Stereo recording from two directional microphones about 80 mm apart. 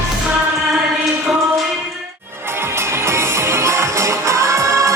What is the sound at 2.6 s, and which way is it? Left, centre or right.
Music, right.